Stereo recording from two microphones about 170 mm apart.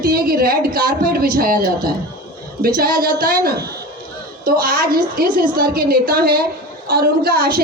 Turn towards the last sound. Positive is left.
turn(degrees=-65)  # may be behind; listen again after turning